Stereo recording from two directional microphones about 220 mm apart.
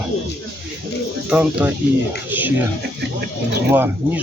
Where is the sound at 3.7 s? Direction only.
10° right (ahead or behind).